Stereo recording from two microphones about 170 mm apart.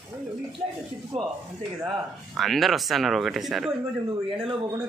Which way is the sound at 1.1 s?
40° right (ahead or behind).